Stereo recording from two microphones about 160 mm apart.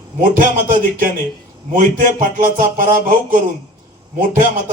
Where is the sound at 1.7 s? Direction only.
55° right (ahead or behind).